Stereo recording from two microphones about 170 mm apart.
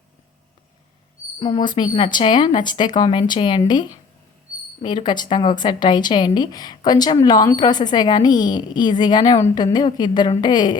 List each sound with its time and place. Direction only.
1.4 s speech: 25° left (ahead or behind)